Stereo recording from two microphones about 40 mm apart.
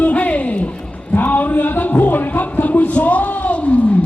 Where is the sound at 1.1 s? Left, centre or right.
Left.